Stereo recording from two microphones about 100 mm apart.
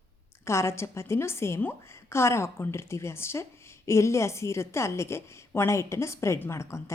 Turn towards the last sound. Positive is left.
turn(degrees=25)  # may be behind; listen again after turning